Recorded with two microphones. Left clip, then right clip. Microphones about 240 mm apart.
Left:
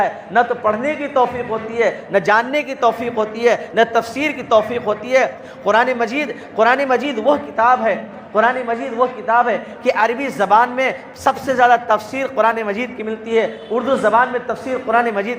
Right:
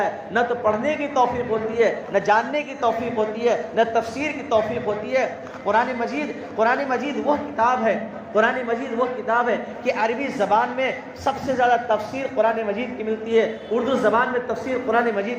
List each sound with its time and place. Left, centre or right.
0.0 s a man's voice: left